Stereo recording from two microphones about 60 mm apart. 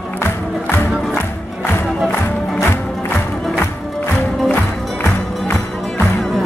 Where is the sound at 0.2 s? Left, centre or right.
Left.